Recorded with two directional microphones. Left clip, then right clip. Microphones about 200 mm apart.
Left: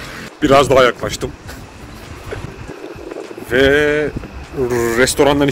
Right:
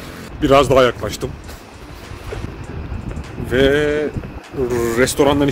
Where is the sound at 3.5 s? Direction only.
Centre (ahead or behind).